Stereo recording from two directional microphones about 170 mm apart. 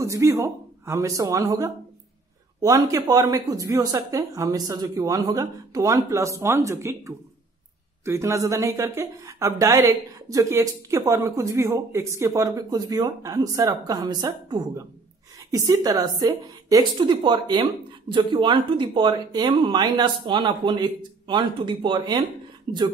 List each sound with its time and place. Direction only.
0.0 s a woman's voice: 20° right (ahead or behind)